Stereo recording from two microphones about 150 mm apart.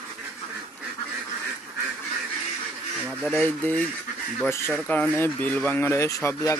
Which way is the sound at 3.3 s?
10° left (ahead or behind).